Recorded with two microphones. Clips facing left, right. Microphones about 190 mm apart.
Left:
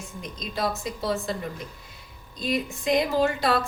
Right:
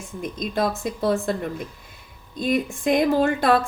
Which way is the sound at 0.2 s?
50° right (ahead or behind).